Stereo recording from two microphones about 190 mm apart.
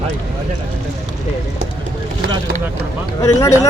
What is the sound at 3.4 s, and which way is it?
Speech, 15° left (ahead or behind).